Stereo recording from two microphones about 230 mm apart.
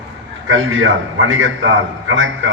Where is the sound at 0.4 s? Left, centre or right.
Right.